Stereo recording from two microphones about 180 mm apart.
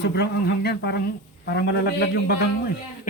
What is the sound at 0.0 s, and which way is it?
A man's voice, 65° left (ahead or behind).